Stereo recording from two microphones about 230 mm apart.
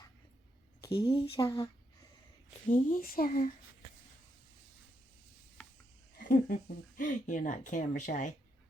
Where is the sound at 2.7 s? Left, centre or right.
Left.